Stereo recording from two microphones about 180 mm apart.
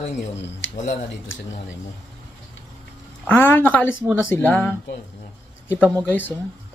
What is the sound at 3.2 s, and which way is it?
Speech, 10° left (ahead or behind).